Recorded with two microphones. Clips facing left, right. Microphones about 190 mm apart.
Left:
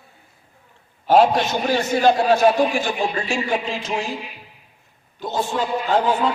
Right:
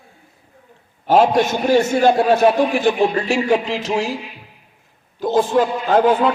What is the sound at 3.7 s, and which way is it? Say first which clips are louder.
Music: right 5 dB; 80° right.